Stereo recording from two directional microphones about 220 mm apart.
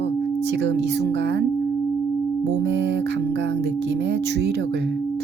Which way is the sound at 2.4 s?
55° right (ahead or behind).